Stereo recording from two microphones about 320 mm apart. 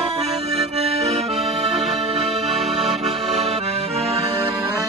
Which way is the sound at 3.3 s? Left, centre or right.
Centre.